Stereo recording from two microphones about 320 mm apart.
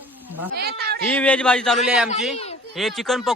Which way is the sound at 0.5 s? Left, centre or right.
Right.